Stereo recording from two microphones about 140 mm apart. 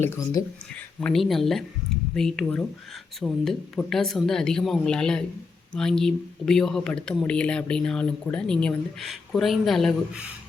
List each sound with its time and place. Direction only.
0.4 s speech: 20° left (ahead or behind)
1.0 s speech: centre (ahead or behind)